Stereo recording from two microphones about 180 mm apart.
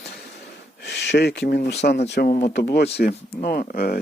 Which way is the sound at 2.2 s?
40° left (ahead or behind).